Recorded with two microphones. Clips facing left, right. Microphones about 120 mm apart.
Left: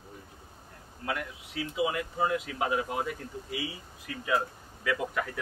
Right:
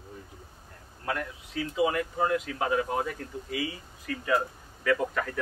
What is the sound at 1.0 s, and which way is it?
Speech, 15° left (ahead or behind).